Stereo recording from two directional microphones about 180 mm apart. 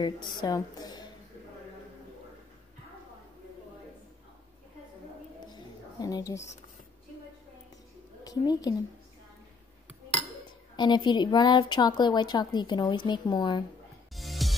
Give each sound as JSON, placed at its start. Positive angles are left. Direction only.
{"t": 0.0, "sound": "a woman's voice", "side_deg": 25}
{"t": 5.5, "sound": "a sound", "side_deg": 20}
{"t": 8.2, "sound": "a woman's voice", "side_deg": 20}
{"t": 10.8, "sound": "a woman's voice", "side_deg": 25}
{"t": 14.1, "sound": "music", "side_deg": 0}